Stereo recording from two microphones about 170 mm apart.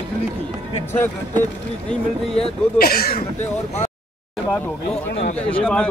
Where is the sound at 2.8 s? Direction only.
65° left (ahead or behind).